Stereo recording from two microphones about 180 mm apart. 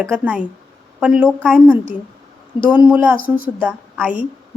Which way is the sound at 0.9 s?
5° right (ahead or behind).